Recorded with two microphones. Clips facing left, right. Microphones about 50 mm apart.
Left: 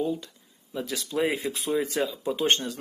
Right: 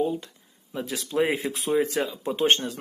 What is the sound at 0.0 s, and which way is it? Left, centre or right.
Speech, right.